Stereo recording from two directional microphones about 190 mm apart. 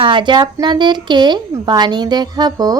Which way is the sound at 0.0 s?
25° right (ahead or behind).